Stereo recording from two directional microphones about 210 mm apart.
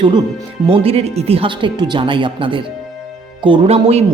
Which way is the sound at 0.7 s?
25° right (ahead or behind).